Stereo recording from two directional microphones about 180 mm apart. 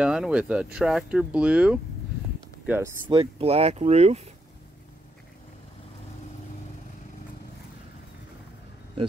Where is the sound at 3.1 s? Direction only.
30° right (ahead or behind).